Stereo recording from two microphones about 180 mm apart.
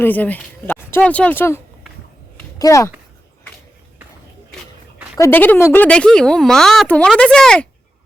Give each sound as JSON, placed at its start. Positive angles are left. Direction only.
{"t": 0.0, "sound": "speech", "side_deg": 10}
{"t": 5.1, "sound": "speech", "side_deg": 15}